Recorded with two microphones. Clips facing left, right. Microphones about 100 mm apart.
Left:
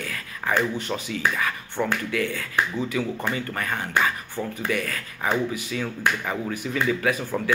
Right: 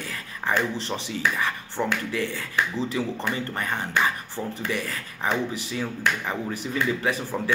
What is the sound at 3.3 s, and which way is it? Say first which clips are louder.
Speech: even; 25° right (ahead or behind).